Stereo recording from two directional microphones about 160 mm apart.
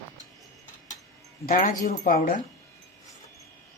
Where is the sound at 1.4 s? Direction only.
60° left (ahead or behind).